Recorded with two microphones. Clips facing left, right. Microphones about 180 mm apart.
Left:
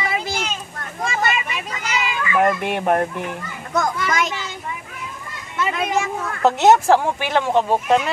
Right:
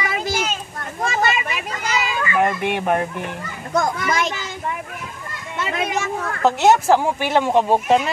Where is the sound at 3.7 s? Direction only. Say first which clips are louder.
Right 1 dB; 30° right (ahead or behind).